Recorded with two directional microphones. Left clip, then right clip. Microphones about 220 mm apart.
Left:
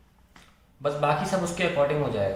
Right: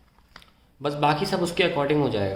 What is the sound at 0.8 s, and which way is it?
Speech, 45° right (ahead or behind).